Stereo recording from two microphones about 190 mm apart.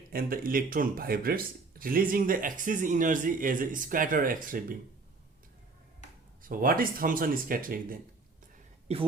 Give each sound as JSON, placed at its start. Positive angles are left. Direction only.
{"t": 0.1, "sound": "speech", "side_deg": -50}
{"t": 6.4, "sound": "speech", "side_deg": -45}
{"t": 8.9, "sound": "speech", "side_deg": -35}